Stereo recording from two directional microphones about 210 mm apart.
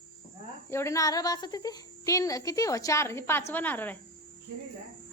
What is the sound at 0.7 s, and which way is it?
A woman's voice, 15° left (ahead or behind).